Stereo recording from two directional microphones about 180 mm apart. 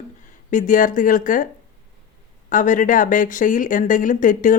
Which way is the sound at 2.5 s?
45° left (ahead or behind).